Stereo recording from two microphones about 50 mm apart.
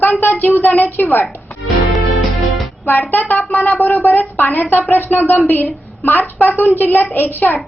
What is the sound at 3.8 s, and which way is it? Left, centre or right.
A woman's voice, left.